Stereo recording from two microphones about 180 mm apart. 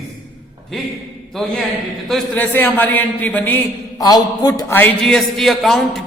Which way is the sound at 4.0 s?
20° left (ahead or behind).